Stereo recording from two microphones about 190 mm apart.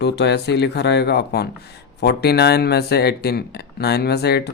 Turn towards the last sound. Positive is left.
turn(degrees=60)  # may be behind; listen again after turning